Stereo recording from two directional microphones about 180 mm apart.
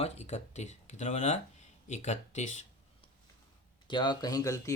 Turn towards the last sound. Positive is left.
turn(degrees=20)  # may be behind; listen again after turning